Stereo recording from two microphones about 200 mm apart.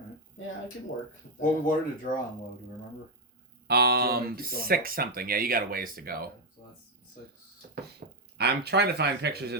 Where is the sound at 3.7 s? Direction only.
50° right (ahead or behind).